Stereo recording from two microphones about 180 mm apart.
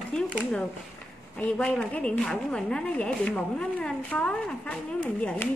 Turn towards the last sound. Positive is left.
turn(degrees=10)  # may be behind; listen again after turning